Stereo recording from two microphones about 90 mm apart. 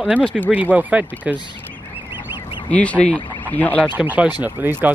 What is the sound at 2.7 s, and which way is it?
Speech, 15° left (ahead or behind).